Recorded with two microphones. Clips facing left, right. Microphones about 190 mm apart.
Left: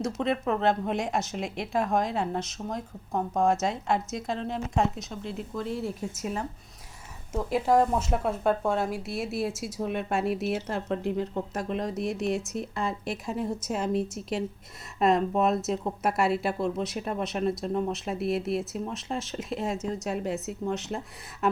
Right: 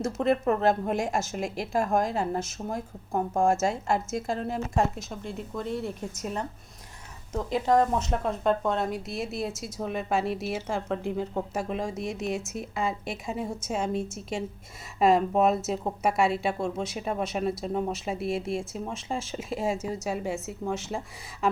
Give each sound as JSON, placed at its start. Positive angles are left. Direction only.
{"t": 0.2, "sound": "speech", "side_deg": -5}
{"t": 7.3, "sound": "speech", "side_deg": 5}